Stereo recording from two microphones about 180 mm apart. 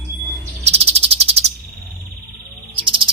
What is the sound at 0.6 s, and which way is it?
Cricket, 35° right (ahead or behind).